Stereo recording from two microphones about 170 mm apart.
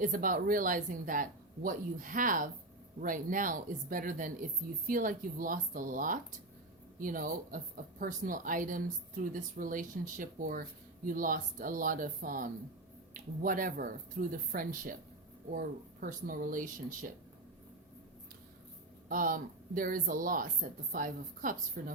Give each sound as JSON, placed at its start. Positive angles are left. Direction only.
{"t": 0.0, "sound": "a woman's voice", "side_deg": -55}
{"t": 19.0, "sound": "a woman's voice", "side_deg": -55}